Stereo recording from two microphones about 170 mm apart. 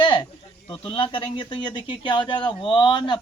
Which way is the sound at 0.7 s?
30° left (ahead or behind).